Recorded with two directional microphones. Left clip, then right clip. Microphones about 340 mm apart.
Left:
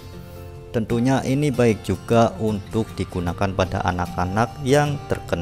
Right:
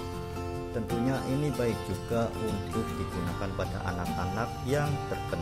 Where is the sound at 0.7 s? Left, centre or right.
Left.